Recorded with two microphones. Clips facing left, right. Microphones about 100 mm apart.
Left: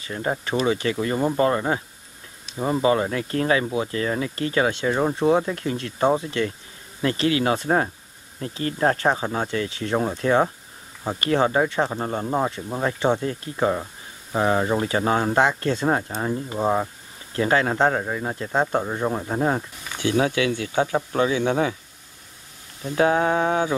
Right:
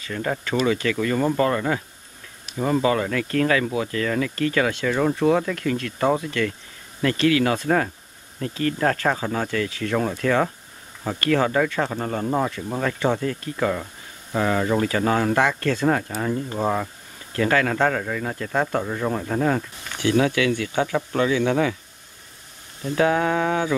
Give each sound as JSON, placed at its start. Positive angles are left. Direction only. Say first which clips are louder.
{"t": 0.0, "sound": "speech", "louder": "even", "side_deg": 25}
{"t": 22.9, "sound": "speech", "louder": "left 1 dB", "side_deg": 25}